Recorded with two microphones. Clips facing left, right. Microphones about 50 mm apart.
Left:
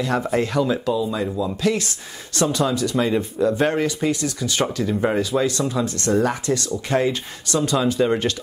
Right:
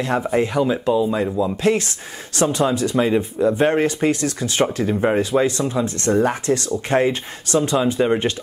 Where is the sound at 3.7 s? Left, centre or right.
Right.